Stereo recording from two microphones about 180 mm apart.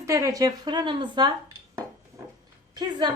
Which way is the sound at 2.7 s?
25° right (ahead or behind).